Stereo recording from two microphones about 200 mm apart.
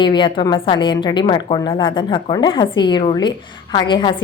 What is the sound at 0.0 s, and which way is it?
A woman's voice, 25° left (ahead or behind).